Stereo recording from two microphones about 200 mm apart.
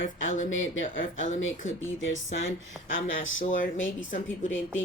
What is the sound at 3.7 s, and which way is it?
Speech, 70° left (ahead or behind).